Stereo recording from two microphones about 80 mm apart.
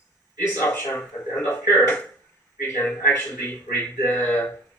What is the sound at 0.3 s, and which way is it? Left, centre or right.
Speech, left.